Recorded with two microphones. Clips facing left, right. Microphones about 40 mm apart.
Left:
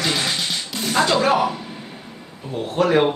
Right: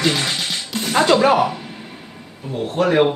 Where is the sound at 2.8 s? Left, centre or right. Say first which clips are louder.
Right 1 dB; centre.